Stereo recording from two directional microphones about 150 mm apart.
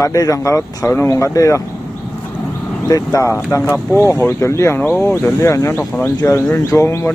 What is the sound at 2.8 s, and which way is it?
Speech, 20° left (ahead or behind).